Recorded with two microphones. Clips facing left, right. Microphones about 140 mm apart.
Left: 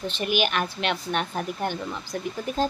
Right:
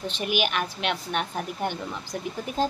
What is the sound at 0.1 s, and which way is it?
Speech, 10° right (ahead or behind).